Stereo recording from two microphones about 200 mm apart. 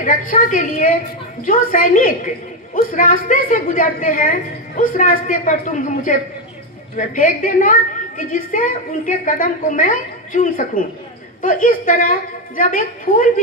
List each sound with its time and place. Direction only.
0.0 s a woman's voice: 40° left (ahead or behind)